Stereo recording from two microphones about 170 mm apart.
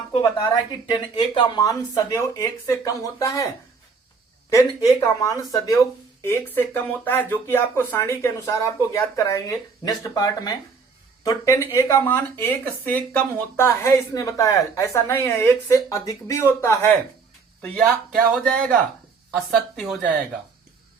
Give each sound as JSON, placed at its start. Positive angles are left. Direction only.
{"t": 0.1, "sound": "speech", "side_deg": 25}
{"t": 4.4, "sound": "a man's voice", "side_deg": 20}